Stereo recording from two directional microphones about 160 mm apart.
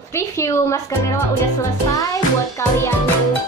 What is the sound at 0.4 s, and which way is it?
Speech, 15° left (ahead or behind).